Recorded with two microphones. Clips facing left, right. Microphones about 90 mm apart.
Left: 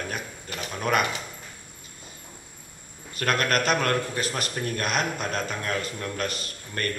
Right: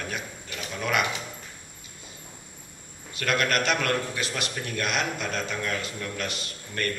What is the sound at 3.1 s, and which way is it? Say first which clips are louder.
A man's voice: left 1 dB; 45° left (ahead or behind).